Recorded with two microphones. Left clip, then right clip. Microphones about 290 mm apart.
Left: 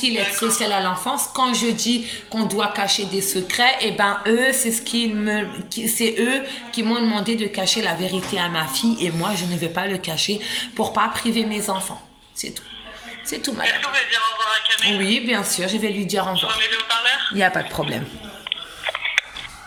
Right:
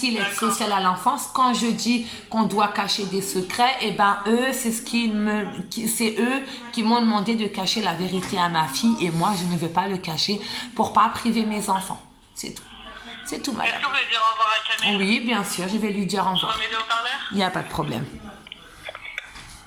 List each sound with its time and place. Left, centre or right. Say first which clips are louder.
0.0 s a woman's voice: left 3 dB; centre
13.3 s a man's voice: left 4 dB; centre
18.4 s a sound: left 14 dB; left